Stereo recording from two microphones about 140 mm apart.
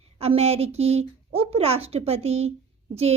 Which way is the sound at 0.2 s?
45° right (ahead or behind).